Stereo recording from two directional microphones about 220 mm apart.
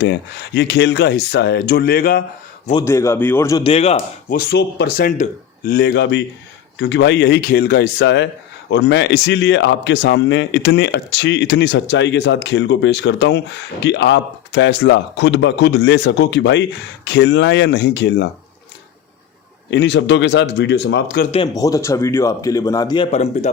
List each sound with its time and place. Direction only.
0.0 s speech: 50° left (ahead or behind)
2.7 s speech: 15° left (ahead or behind)
3.6 s speech: 25° left (ahead or behind)
4.4 s speech: 45° left (ahead or behind)
19.7 s speech: 50° left (ahead or behind)
21.3 s speech: 20° left (ahead or behind)
23.1 s speech: 30° left (ahead or behind)